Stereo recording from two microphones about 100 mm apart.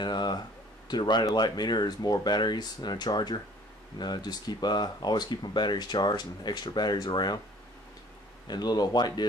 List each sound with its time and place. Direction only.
0.0 s a sound: 45° left (ahead or behind)
0.8 s speech: 45° left (ahead or behind)
8.5 s speech: 45° left (ahead or behind)